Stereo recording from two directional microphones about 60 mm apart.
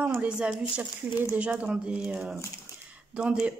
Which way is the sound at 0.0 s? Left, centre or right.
Centre.